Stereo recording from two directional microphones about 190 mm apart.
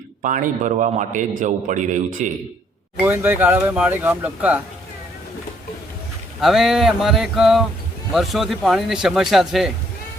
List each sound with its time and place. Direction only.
0.2 s a man's voice: 45° right (ahead or behind)
3.0 s speech: 10° right (ahead or behind)
6.4 s speech: centre (ahead or behind)